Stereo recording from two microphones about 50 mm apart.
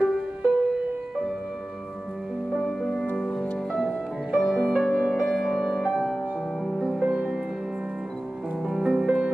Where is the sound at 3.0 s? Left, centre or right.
Left.